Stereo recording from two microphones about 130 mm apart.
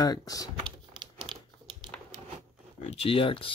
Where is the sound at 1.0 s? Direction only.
40° right (ahead or behind).